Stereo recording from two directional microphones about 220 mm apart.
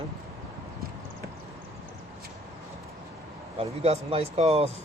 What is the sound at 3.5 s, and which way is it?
Speech, 25° right (ahead or behind).